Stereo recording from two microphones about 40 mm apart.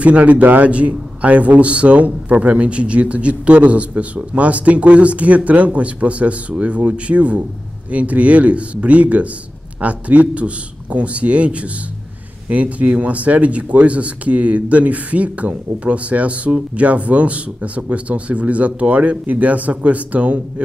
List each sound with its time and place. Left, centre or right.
0.0 s speech: right